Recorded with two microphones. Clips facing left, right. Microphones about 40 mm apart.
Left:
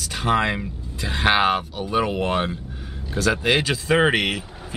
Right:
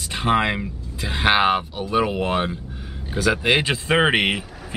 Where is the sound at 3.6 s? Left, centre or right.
Right.